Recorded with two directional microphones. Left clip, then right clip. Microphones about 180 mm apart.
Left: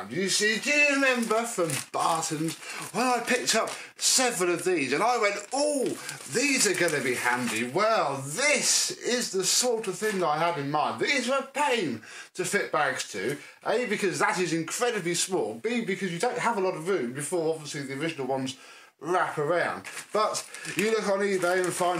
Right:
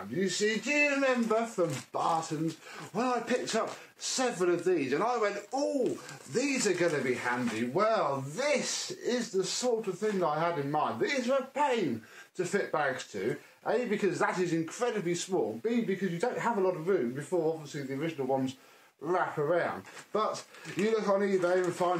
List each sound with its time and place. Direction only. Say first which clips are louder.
0.2 s speech: left 5 dB; 10° left (ahead or behind)